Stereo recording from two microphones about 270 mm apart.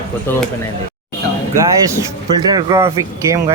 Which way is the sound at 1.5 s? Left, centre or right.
Centre.